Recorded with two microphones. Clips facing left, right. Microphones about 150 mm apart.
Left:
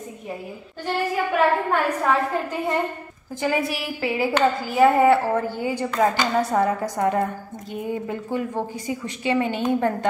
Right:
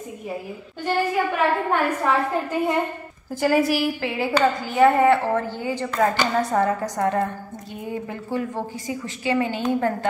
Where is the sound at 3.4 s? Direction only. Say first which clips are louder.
Right 5 dB; centre (ahead or behind); by 9.9 s 20° left (ahead or behind).